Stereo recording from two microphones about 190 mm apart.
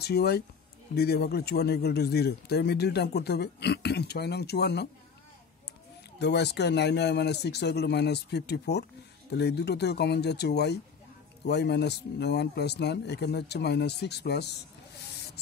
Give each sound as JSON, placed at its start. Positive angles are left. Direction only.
{"t": 0.0, "sound": "a man's voice", "side_deg": 55}
{"t": 6.1, "sound": "a man's voice", "side_deg": 60}